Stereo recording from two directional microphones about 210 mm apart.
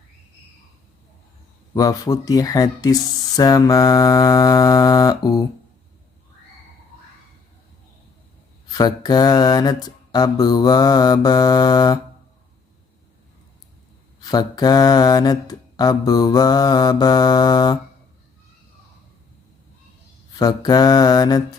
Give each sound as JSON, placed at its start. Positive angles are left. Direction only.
{"t": 1.7, "sound": "speech", "side_deg": 15}
{"t": 8.7, "sound": "mantra", "side_deg": 20}
{"t": 14.2, "sound": "mantra", "side_deg": 20}
{"t": 20.3, "sound": "mantra", "side_deg": 20}